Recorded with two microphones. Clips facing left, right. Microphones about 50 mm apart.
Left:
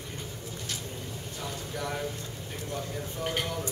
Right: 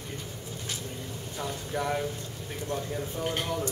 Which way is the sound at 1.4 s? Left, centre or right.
Right.